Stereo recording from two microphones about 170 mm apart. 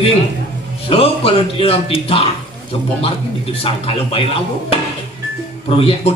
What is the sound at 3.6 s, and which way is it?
A man's voice, 35° left (ahead or behind).